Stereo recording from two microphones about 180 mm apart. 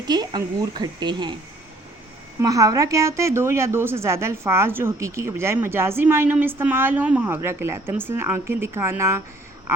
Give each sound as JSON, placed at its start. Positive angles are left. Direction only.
{"t": 0.1, "sound": "a woman's voice", "side_deg": -25}
{"t": 2.4, "sound": "a woman's voice", "side_deg": -20}